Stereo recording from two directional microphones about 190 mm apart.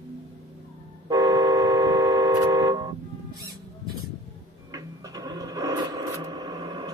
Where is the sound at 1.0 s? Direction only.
20° right (ahead or behind).